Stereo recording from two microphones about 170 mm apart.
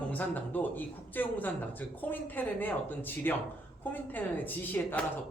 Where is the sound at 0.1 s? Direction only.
10° left (ahead or behind).